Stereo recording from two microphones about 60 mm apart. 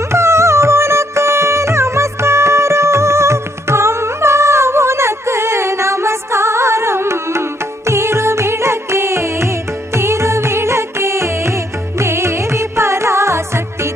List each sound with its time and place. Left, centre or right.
0.1 s music: right